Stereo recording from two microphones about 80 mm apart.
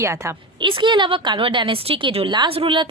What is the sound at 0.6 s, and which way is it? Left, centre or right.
A woman's voice, right.